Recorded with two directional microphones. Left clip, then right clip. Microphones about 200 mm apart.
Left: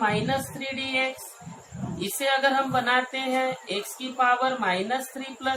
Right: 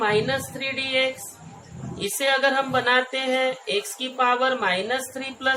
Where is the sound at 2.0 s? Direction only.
35° right (ahead or behind).